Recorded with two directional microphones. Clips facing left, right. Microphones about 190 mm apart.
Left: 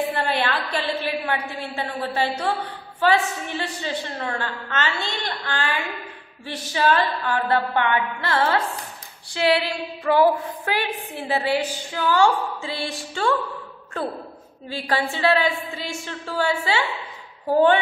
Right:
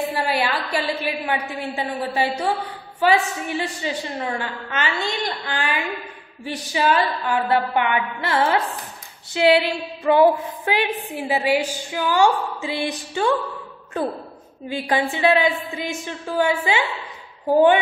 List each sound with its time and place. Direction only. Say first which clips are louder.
0.1 s a woman's voice: right 1 dB; 10° right (ahead or behind)